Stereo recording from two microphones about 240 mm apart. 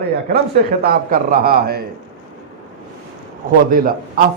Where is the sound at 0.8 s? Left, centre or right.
Right.